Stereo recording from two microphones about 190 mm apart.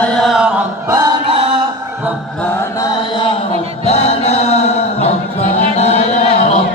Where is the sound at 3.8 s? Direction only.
35° left (ahead or behind).